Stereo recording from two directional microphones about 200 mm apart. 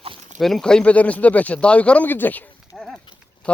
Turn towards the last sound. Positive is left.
turn(degrees=5)  # may be behind; listen again after turning